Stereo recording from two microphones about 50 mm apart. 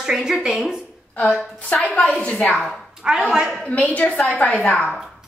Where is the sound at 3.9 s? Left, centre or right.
Left.